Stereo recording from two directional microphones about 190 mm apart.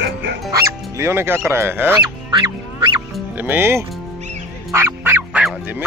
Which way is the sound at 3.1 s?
10° right (ahead or behind).